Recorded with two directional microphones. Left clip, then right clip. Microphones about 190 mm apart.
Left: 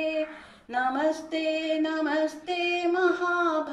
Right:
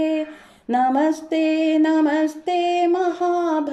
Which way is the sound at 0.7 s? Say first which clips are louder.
Right 7 dB; 35° right (ahead or behind).